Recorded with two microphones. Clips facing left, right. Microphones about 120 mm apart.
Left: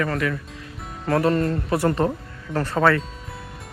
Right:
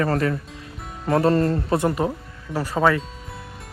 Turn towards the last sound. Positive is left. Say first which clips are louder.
# left 1 dB
turn(degrees=-10)  # may be behind; listen again after turning